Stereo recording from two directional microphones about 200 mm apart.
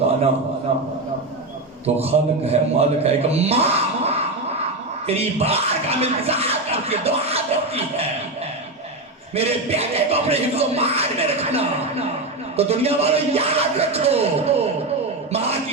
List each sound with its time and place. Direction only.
0.7 s a man's voice: 30° right (ahead or behind)
2.0 s speech: 30° right (ahead or behind)
9.3 s speech: 30° right (ahead or behind)
15.3 s a sound: 30° right (ahead or behind)